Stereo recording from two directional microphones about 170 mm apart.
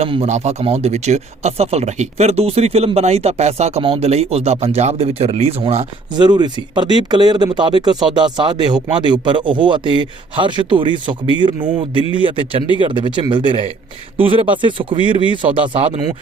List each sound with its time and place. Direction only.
0.0 s speech: 35° right (ahead or behind)